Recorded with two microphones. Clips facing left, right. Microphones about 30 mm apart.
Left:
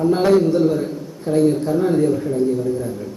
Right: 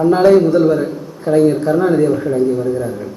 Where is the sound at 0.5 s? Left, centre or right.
Right.